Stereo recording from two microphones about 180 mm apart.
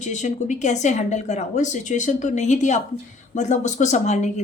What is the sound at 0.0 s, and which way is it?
Speech, 40° left (ahead or behind).